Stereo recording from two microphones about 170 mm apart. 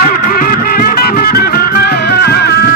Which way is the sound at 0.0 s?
60° left (ahead or behind).